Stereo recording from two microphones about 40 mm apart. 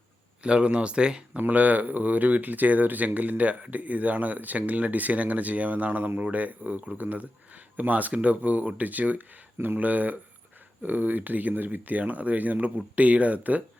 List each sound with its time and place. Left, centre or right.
0.4 s speech: right
1.4 s speech: right